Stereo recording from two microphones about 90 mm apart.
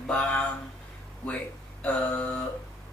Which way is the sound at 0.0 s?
15° left (ahead or behind).